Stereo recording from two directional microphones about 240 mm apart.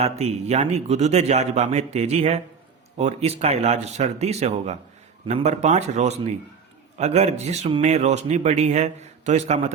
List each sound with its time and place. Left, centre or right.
0.0 s speech: right